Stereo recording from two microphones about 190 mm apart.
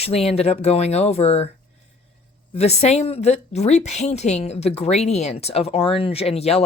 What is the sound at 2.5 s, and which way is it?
Speech, 35° left (ahead or behind).